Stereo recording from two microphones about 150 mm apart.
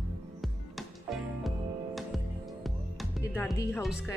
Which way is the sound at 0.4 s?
Centre (ahead or behind).